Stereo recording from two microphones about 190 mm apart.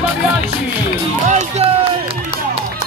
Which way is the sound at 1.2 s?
35° right (ahead or behind).